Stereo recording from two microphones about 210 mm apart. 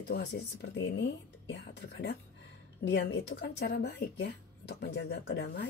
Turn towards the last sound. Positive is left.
turn(degrees=55)  # may be behind; listen again after turning